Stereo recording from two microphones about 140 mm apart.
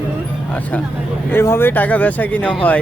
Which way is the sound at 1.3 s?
15° left (ahead or behind).